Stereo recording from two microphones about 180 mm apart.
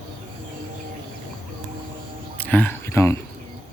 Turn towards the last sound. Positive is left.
turn(degrees=15)  # may be behind; listen again after turning